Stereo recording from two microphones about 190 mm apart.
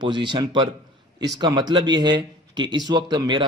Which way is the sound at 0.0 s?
25° right (ahead or behind).